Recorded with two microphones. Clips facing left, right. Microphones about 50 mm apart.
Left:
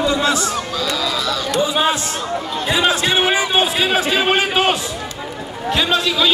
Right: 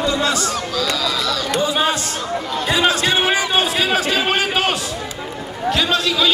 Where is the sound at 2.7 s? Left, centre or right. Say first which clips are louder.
Even; centre.